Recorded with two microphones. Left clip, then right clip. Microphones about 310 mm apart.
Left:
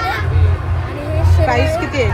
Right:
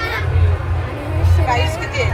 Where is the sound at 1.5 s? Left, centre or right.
Left.